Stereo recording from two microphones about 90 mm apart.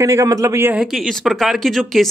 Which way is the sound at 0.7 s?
5° right (ahead or behind).